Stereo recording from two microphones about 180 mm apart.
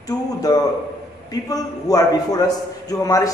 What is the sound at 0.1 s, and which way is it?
A man's voice, 20° left (ahead or behind).